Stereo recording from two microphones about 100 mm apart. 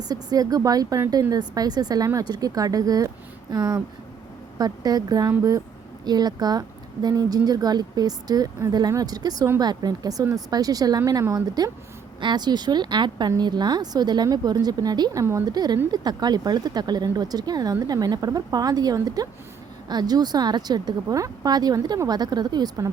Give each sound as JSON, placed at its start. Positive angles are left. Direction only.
{"t": 0.1, "sound": "speech", "side_deg": -40}
{"t": 12.2, "sound": "speech", "side_deg": -45}
{"t": 15.2, "sound": "a woman's voice", "side_deg": -30}
{"t": 15.4, "sound": "speech", "side_deg": -40}